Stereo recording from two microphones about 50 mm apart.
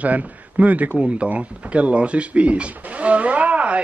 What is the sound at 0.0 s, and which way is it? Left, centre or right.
Speech, right.